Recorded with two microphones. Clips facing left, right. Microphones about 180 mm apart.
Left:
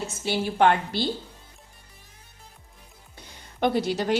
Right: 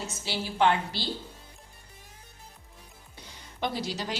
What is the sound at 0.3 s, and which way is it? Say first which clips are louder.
Speech: left 4 dB; 50° left (ahead or behind).